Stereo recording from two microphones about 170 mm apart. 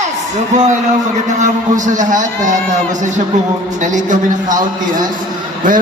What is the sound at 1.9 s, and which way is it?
Speech, 50° right (ahead or behind).